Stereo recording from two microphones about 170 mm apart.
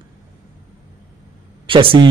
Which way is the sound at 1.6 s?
30° right (ahead or behind).